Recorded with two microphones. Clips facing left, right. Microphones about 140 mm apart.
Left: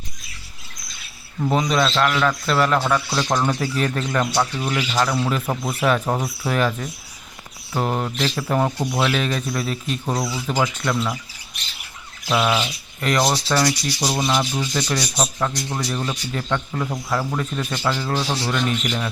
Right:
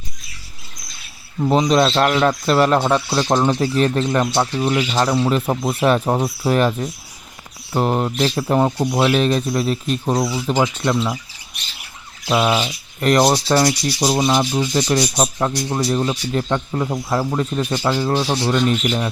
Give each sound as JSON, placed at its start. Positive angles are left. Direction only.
{"t": 1.4, "sound": "rub", "side_deg": -25}
{"t": 12.3, "sound": "rub", "side_deg": -20}
{"t": 13.0, "sound": "rub", "side_deg": -40}